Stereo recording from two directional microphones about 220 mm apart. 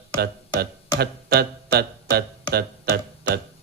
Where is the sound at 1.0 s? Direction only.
45° right (ahead or behind).